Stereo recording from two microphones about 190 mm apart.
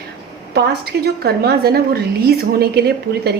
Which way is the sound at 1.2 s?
55° right (ahead or behind).